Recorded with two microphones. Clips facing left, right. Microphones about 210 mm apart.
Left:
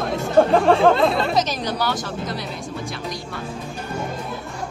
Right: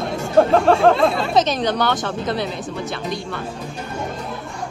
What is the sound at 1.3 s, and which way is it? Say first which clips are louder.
Speech: right 4 dB; 30° right (ahead or behind).